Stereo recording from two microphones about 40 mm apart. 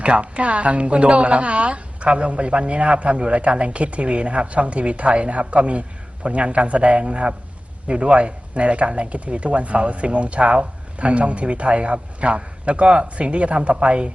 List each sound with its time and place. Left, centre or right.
0.0 s a man's voice: right